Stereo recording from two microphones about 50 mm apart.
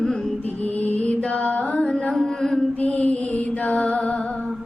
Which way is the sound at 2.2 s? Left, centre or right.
Centre.